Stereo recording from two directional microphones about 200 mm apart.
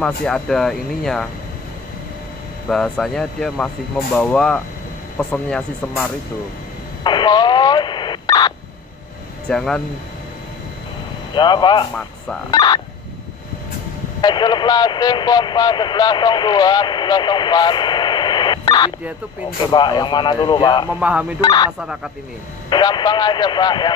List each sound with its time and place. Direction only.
0.0 s speech: 5° left (ahead or behind)
2.7 s speech: centre (ahead or behind)
7.0 s speech: 20° left (ahead or behind)
9.5 s speech: 5° left (ahead or behind)
11.3 s speech: 20° left (ahead or behind)
14.2 s speech: 20° left (ahead or behind)
20.9 s speech: 5° right (ahead or behind)
21.4 s speech: 20° left (ahead or behind)
21.7 s speech: 5° right (ahead or behind)
22.7 s speech: 20° left (ahead or behind)